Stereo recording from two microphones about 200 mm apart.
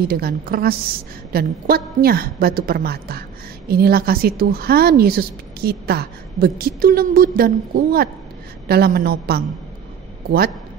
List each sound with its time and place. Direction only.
0.1 s a woman's voice: 50° right (ahead or behind)